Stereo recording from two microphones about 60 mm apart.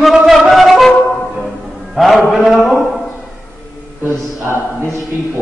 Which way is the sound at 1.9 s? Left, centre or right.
Centre.